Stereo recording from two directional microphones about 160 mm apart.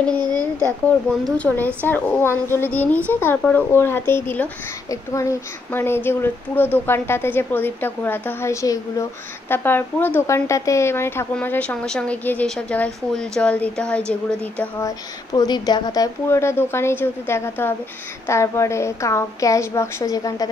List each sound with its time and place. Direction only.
0.2 s a sound: 20° right (ahead or behind)
1.2 s speech: 10° left (ahead or behind)
14.9 s speech: 25° left (ahead or behind)